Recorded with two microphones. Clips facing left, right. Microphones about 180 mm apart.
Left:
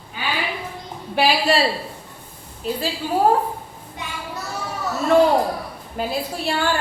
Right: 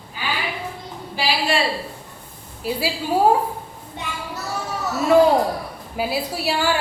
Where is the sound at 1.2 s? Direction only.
60° left (ahead or behind).